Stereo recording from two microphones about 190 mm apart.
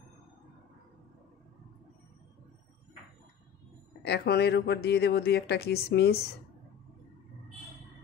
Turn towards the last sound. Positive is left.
turn(degrees=60)  # may be behind; listen again after turning